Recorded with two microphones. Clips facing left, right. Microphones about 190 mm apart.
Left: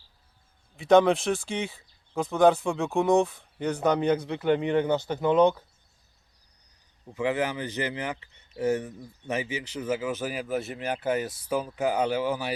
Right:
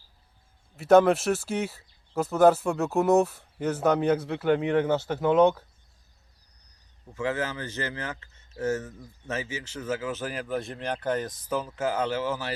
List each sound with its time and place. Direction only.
0.8 s speech: 5° right (ahead or behind)
7.1 s speech: 15° left (ahead or behind)